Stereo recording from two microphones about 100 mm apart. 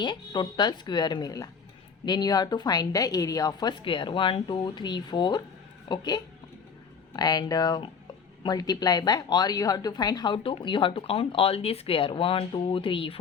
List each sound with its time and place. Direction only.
0.0 s a woman's voice: 50° left (ahead or behind)